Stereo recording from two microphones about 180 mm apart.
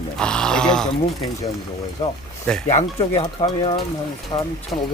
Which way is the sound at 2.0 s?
35° left (ahead or behind).